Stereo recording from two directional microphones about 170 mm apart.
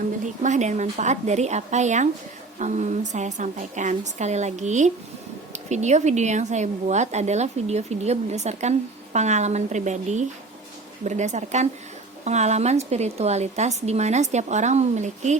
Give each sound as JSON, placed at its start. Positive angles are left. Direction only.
{"t": 0.4, "sound": "a woman's voice", "side_deg": -45}